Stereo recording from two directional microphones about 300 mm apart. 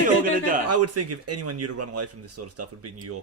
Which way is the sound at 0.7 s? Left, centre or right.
Right.